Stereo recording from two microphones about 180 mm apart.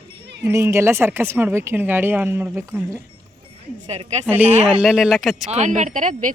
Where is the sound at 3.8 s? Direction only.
35° right (ahead or behind).